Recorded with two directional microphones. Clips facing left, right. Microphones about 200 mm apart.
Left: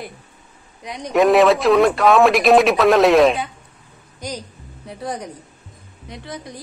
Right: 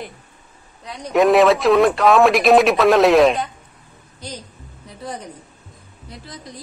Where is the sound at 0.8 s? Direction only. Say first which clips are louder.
Left 2 dB; 15° left (ahead or behind).